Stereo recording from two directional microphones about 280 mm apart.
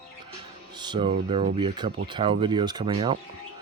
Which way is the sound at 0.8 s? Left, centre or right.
Centre.